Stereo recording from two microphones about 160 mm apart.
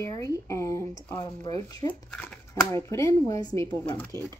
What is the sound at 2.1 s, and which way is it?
Speech, 5° left (ahead or behind).